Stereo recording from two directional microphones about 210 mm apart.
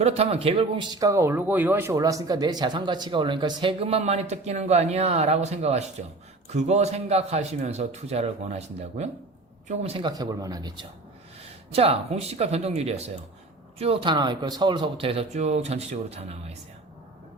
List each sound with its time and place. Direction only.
0.0 s a man's voice: 30° right (ahead or behind)